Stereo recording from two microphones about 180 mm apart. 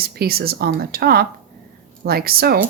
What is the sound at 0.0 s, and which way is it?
Speech, 60° right (ahead or behind).